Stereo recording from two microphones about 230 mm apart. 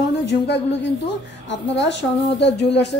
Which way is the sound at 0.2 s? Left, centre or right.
Left.